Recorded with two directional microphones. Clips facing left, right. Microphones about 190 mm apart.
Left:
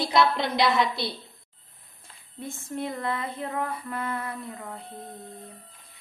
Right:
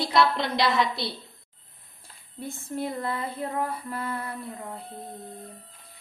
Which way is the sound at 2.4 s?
60° right (ahead or behind).